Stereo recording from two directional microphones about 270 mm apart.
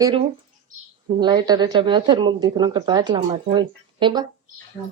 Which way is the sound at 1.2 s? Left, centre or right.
Centre.